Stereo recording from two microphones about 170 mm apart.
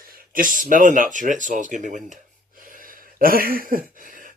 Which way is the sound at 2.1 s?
50° right (ahead or behind).